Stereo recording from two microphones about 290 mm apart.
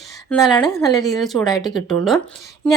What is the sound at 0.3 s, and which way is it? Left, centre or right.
A woman's voice, centre.